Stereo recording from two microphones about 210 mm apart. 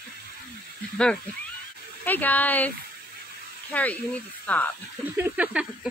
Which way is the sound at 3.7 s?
5° left (ahead or behind).